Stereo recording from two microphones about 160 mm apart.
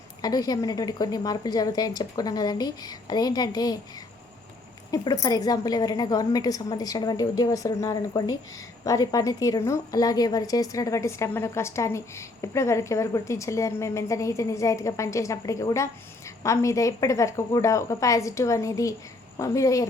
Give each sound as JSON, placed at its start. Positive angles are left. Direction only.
{"t": 0.2, "sound": "a woman's voice", "side_deg": 25}
{"t": 4.9, "sound": "a woman's voice", "side_deg": 25}